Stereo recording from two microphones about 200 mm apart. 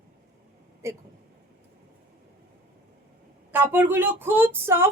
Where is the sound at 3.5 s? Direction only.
10° right (ahead or behind).